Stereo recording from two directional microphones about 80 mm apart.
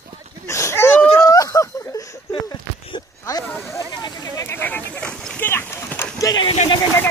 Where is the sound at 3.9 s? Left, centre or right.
Left.